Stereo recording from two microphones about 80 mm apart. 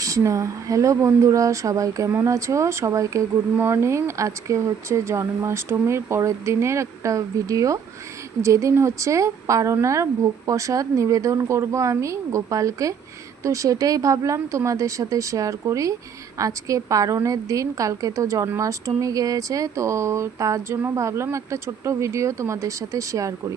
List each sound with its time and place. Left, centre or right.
0.0 s speech: right
3.6 s speech: right